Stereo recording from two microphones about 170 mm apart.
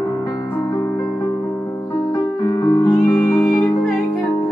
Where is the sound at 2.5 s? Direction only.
20° left (ahead or behind).